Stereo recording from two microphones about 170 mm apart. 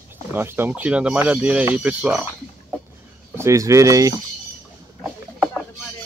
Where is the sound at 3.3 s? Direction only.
15° right (ahead or behind).